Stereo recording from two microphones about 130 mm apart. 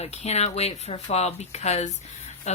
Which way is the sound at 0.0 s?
55° left (ahead or behind).